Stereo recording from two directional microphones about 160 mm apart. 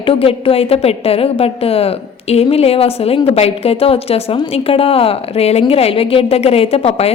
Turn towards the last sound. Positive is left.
turn(degrees=40)  # may be behind; listen again after turning